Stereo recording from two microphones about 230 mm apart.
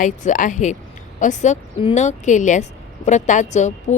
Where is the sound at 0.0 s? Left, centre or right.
Left.